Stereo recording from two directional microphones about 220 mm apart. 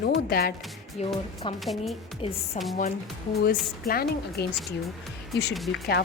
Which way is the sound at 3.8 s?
45° left (ahead or behind).